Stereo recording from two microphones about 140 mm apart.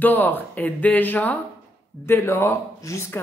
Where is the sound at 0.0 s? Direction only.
15° left (ahead or behind).